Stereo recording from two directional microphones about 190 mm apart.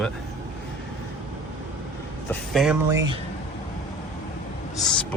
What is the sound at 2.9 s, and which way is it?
Speech, 15° right (ahead or behind).